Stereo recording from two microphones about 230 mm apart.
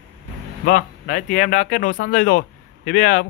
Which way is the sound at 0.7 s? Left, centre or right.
Left.